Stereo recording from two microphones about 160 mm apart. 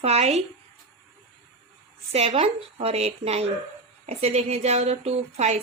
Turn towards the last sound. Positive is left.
turn(degrees=-40)  # may be behind; listen again after turning